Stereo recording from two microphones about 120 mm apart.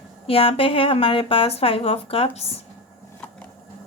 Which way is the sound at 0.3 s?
50° left (ahead or behind).